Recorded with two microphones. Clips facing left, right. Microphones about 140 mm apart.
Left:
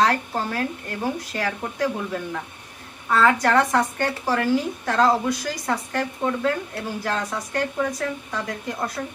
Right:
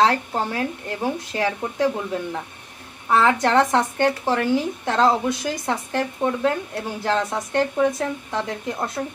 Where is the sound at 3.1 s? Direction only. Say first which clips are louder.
Right 1 dB; 20° right (ahead or behind).